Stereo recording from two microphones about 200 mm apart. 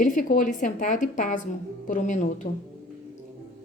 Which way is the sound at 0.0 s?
40° left (ahead or behind).